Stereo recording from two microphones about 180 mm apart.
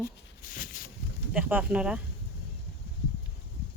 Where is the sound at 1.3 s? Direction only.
5° right (ahead or behind).